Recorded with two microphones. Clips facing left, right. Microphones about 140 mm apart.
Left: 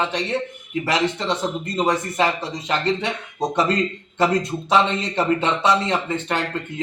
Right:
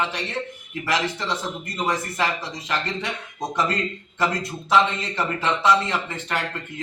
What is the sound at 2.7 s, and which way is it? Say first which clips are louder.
A man's voice: left 6 dB; 25° left (ahead or behind).